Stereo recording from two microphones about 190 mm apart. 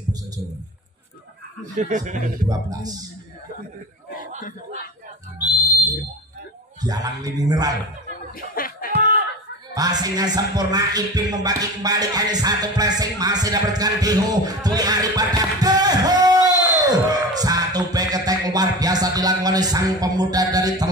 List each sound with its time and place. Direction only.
1.6 s speech: 40° right (ahead or behind)
2.4 s speech: 20° right (ahead or behind)
5.4 s whistle: 20° left (ahead or behind)
6.8 s speech: 20° right (ahead or behind)
8.4 s a sound: 50° left (ahead or behind)
9.8 s speech: 20° right (ahead or behind)